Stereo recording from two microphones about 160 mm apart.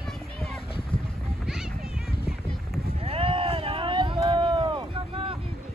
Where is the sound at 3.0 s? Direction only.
35° right (ahead or behind).